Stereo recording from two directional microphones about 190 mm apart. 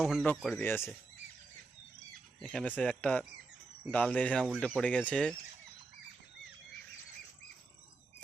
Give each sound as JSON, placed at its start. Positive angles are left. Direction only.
{"t": 0.0, "sound": "speech", "side_deg": 0}
{"t": 0.6, "sound": "speech", "side_deg": 10}
{"t": 2.4, "sound": "speech", "side_deg": 5}